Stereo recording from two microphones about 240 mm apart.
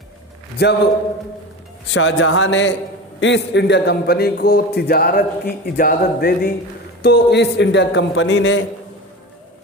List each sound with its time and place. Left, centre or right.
0.5 s a man's voice: left
1.9 s a man's voice: left